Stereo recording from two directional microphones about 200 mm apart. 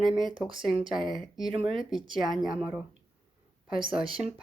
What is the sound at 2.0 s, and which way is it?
Speech, 25° right (ahead or behind).